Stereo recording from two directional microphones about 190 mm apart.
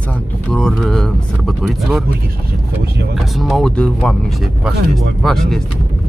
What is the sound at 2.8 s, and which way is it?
Speech, 60° right (ahead or behind).